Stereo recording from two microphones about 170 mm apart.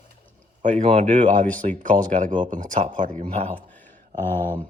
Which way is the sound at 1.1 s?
50° right (ahead or behind).